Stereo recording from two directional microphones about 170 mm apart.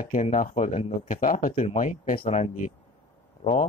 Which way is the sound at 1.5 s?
35° left (ahead or behind).